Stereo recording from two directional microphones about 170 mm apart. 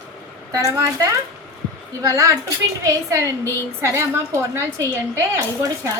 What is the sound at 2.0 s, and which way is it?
A woman's voice, 20° right (ahead or behind).